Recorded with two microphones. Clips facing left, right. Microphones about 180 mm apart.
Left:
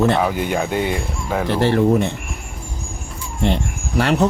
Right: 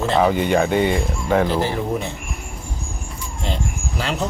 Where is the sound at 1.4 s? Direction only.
70° left (ahead or behind).